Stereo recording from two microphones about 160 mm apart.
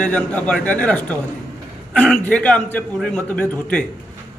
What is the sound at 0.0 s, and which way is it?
A man's voice, 5° left (ahead or behind).